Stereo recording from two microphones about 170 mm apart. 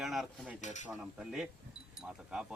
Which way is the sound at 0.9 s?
5° right (ahead or behind).